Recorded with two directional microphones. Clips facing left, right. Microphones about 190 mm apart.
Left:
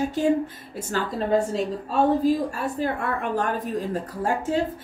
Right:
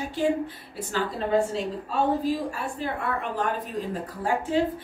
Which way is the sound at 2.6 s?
45° left (ahead or behind).